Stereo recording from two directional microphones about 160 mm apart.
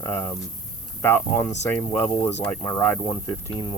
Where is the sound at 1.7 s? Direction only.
15° left (ahead or behind).